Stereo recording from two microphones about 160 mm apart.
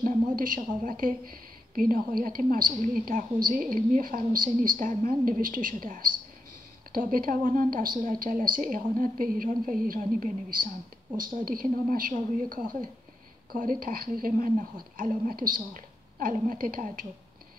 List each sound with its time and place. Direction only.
0.0 s a woman's voice: 55° right (ahead or behind)
13.5 s a woman's voice: 65° right (ahead or behind)